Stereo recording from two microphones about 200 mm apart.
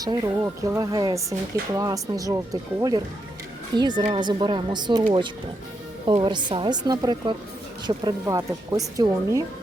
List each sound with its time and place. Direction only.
0.0 s speech: 20° right (ahead or behind)
6.1 s speech: 25° right (ahead or behind)